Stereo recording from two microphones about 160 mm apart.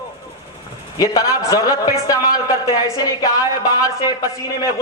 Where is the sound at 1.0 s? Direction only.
20° left (ahead or behind).